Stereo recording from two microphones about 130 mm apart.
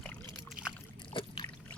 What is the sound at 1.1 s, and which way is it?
Trickle, 40° left (ahead or behind).